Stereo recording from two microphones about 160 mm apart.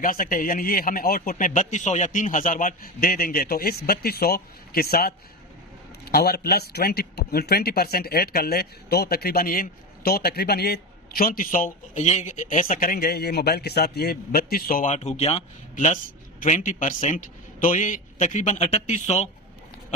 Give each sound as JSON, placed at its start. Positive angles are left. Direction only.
{"t": 0.0, "sound": "a man's voice", "side_deg": 60}